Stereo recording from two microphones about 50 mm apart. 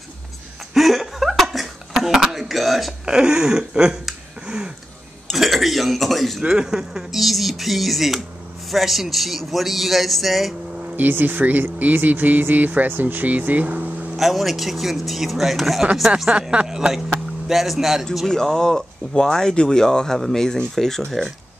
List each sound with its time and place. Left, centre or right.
0.7 s chuckle: centre
2.4 s speech: centre
3.1 s speech: centre
4.5 s a sound: centre
5.3 s a man's voice: centre
6.4 s a man's voice: centre
11.0 s speech: right
14.1 s a man's voice: centre
16.3 s speech: right
16.6 s a man's voice: centre
18.3 s speech: centre